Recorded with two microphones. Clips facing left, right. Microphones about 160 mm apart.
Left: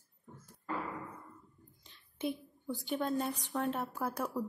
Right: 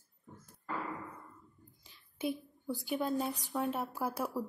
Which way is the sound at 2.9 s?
5° right (ahead or behind).